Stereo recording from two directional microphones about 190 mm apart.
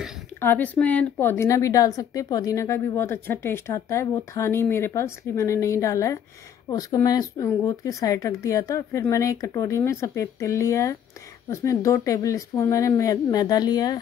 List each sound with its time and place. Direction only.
0.4 s speech: 10° left (ahead or behind)